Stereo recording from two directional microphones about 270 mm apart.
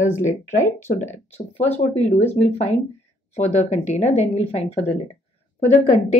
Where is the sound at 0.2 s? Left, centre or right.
Left.